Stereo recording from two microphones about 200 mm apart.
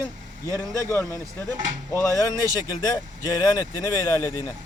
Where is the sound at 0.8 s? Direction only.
15° left (ahead or behind).